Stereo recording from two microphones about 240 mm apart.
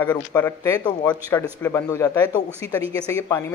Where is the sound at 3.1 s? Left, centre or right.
Centre.